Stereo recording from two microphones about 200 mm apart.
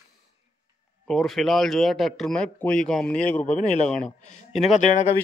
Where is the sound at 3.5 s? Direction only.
35° left (ahead or behind).